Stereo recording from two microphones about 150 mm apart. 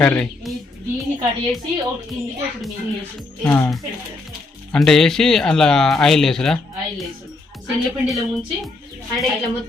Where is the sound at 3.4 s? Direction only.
10° left (ahead or behind).